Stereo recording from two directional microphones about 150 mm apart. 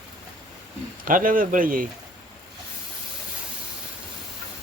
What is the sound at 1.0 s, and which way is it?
Speech, 65° right (ahead or behind).